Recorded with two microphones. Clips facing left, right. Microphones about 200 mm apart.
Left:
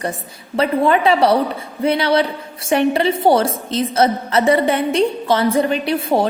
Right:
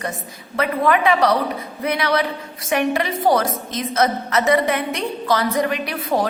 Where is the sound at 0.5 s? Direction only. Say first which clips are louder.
Left 3 dB; 30° left (ahead or behind).